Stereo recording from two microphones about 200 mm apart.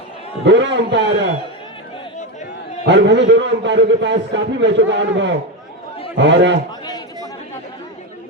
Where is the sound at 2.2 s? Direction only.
35° left (ahead or behind).